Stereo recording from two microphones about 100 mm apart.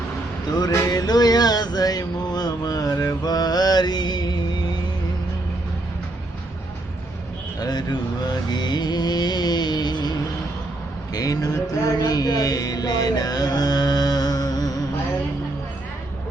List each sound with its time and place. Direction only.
0.5 s music: 40° left (ahead or behind)
7.6 s music: 45° left (ahead or behind)